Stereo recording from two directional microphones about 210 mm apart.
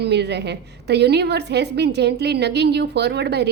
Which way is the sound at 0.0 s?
55° right (ahead or behind).